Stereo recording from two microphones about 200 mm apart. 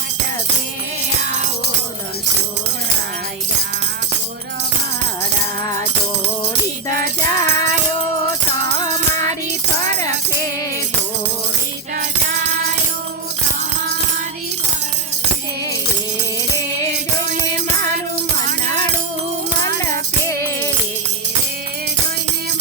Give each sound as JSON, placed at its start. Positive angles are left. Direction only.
{"t": 6.8, "sound": "music", "side_deg": 15}
{"t": 20.2, "sound": "music", "side_deg": 10}